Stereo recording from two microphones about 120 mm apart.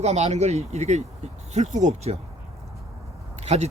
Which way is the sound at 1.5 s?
80° right.